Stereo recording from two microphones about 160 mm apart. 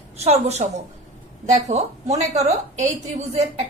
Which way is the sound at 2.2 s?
45° right (ahead or behind).